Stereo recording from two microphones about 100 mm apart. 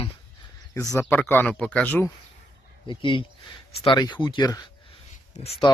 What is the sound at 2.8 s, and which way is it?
Speech, 55° left (ahead or behind).